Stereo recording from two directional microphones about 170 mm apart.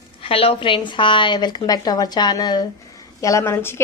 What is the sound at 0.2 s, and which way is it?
Speech, 35° left (ahead or behind).